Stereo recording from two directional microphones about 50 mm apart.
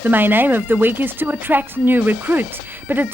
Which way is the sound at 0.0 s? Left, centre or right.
Right.